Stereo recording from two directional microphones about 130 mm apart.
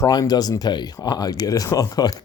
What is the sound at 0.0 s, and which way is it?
Speech, 30° left (ahead or behind).